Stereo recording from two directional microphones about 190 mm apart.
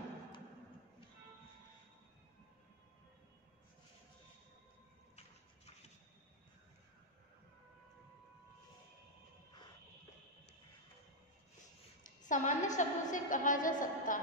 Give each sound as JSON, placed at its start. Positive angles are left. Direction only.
{"t": 12.0, "sound": "a woman's voice", "side_deg": 40}